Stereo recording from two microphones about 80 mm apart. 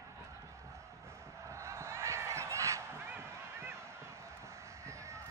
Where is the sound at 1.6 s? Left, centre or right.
Right.